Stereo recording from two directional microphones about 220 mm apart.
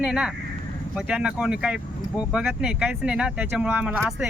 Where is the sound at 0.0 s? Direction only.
5° right (ahead or behind).